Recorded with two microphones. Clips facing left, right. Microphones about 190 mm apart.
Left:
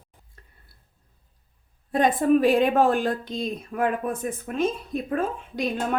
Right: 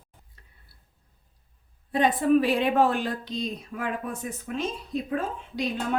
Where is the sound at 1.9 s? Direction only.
45° left (ahead or behind).